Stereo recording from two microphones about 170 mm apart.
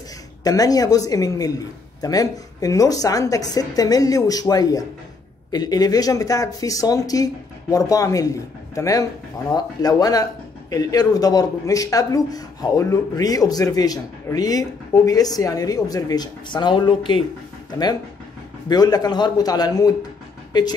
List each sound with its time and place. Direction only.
0.4 s speech: 20° left (ahead or behind)